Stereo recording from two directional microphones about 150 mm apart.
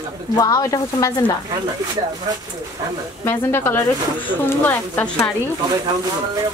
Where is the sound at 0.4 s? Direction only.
25° left (ahead or behind).